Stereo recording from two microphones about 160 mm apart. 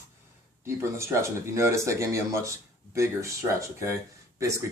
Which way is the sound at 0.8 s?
15° right (ahead or behind).